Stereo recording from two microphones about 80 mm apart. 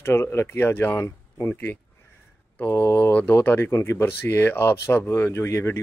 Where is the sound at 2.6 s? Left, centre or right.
Left.